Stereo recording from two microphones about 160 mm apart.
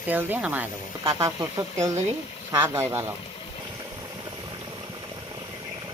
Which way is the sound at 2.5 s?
15° right (ahead or behind).